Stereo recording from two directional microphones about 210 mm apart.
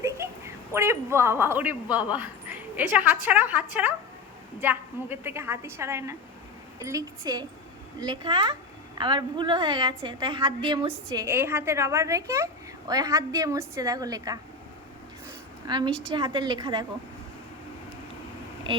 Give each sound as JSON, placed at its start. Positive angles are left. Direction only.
{"t": 0.0, "sound": "a woman's voice", "side_deg": -15}
{"t": 15.6, "sound": "a woman's voice", "side_deg": -20}